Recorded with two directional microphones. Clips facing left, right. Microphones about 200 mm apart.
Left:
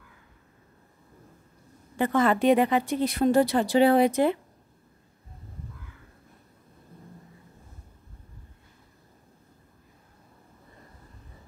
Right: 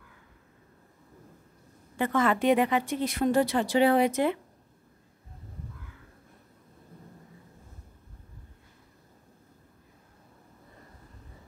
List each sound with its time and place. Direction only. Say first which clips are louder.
2.0 s speech: left 3 dB; 35° left (ahead or behind)